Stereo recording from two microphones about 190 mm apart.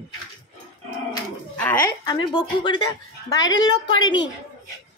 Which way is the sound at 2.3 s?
25° left (ahead or behind).